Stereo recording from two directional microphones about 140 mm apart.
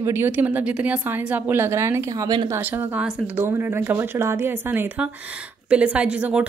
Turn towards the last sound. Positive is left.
turn(degrees=-10)  # may be behind; listen again after turning